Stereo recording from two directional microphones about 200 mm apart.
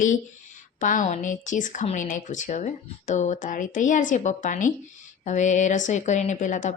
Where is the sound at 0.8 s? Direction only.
40° left (ahead or behind).